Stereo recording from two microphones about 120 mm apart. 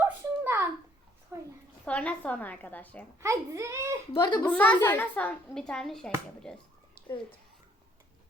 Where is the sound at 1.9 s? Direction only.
10° left (ahead or behind).